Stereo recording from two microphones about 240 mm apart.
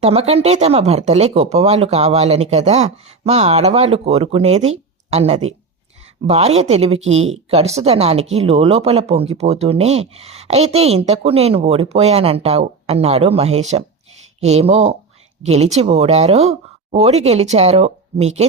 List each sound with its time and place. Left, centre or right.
0.0 s speech: right
4.7 s a sound: right
6.2 s speech: right